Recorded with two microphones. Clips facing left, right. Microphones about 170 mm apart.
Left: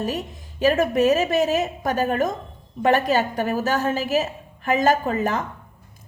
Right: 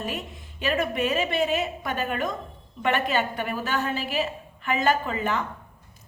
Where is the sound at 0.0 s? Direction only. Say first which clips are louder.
Left 6 dB; 40° left (ahead or behind).